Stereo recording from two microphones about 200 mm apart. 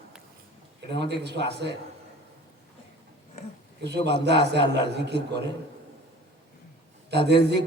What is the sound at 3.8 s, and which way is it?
A man's voice, 55° right (ahead or behind).